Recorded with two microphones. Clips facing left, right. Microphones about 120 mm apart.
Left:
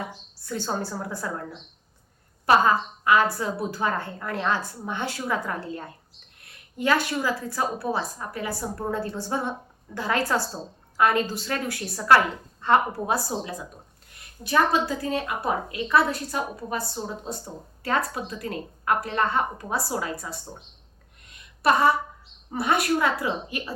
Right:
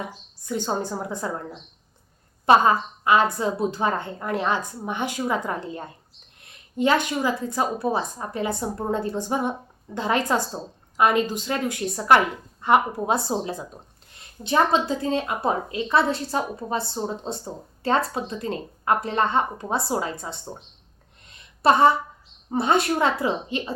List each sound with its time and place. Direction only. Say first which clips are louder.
0.4 s a woman's voice: right 3 dB; 15° right (ahead or behind)
2.5 s a woman's voice: right 2 dB; 20° right (ahead or behind)
21.6 s a woman's voice: right 3 dB; 25° right (ahead or behind)